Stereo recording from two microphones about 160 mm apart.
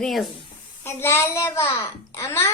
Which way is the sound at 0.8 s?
15° left (ahead or behind).